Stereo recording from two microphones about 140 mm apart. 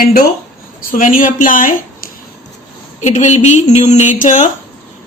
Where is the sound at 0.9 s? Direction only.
70° left (ahead or behind).